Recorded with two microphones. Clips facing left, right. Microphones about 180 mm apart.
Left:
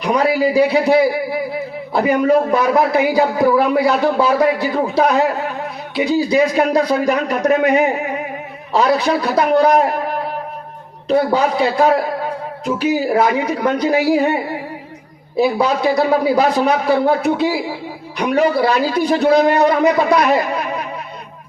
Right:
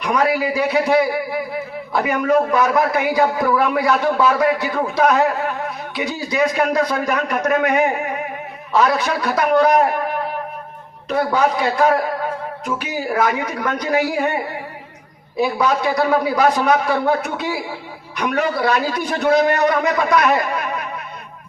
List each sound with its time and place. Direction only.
0.0 s a man's voice: 30° left (ahead or behind)
11.1 s a man's voice: 30° left (ahead or behind)
15.5 s a man's voice: 30° left (ahead or behind)